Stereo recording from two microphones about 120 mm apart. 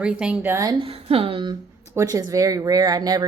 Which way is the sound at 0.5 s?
30° right (ahead or behind).